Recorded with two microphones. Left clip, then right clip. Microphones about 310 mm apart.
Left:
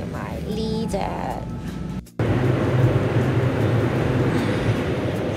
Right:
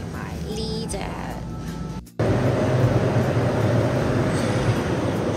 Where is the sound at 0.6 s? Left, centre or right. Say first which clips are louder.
Left 4 dB; centre.